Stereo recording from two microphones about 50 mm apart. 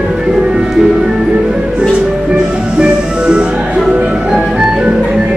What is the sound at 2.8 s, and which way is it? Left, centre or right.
Music, centre.